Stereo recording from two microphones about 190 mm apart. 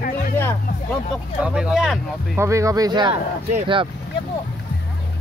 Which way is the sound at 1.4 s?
5° right (ahead or behind).